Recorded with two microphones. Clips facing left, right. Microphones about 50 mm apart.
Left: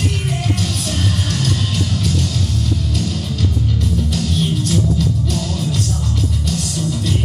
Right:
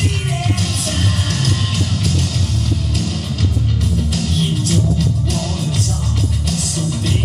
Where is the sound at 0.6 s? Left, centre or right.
Right.